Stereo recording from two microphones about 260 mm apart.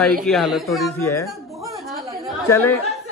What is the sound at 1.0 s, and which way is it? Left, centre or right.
Speech, centre.